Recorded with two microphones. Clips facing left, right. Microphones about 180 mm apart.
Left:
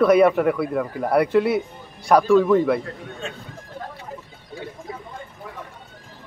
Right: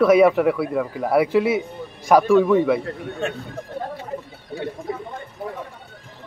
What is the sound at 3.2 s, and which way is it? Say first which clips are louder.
Speech: right 8 dB; 65° right (ahead or behind).